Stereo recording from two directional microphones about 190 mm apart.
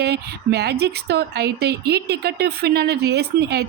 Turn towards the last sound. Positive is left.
turn(degrees=-60)  # may be behind; listen again after turning